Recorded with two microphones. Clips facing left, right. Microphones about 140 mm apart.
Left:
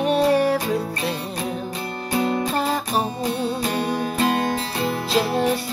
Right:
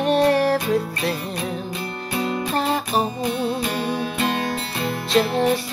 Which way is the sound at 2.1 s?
25° left (ahead or behind).